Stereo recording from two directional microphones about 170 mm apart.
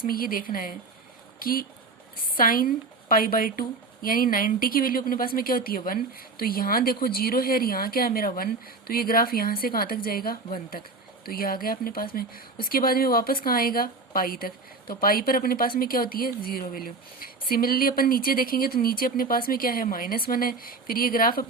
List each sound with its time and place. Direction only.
0.0 s speech: 60° left (ahead or behind)